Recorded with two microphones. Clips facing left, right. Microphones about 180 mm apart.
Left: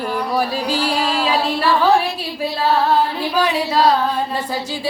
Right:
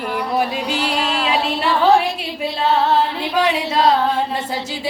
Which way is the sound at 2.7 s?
25° right (ahead or behind).